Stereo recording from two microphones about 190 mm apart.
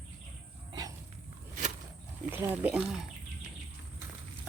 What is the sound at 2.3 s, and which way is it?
Speech, 10° right (ahead or behind).